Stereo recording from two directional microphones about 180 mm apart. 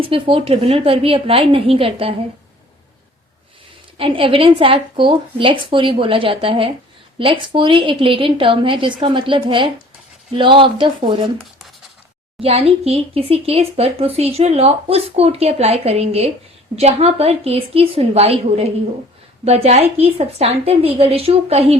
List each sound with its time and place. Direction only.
0.0 s speech: 30° right (ahead or behind)
3.9 s speech: 30° right (ahead or behind)
12.4 s speech: 35° right (ahead or behind)